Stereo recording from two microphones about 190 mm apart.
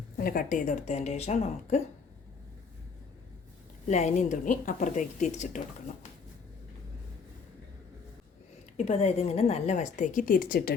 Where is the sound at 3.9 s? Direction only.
40° left (ahead or behind).